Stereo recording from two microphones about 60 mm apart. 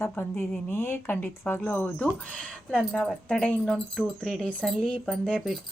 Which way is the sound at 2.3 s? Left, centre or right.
Left.